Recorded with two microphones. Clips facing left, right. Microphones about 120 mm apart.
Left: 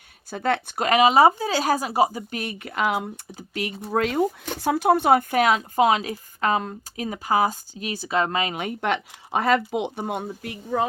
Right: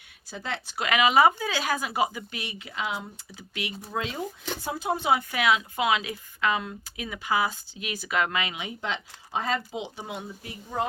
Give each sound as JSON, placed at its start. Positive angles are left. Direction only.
{"t": 0.3, "sound": "speech", "side_deg": 55}
{"t": 0.9, "sound": "speech", "side_deg": 35}
{"t": 3.3, "sound": "speech", "side_deg": 45}
{"t": 3.9, "sound": "speech", "side_deg": 60}